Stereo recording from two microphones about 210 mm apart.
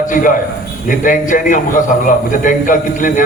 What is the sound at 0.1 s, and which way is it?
A man's voice, 40° left (ahead or behind).